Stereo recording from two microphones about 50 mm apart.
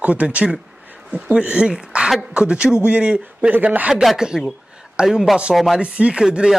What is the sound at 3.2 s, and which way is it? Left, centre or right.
Speech, right.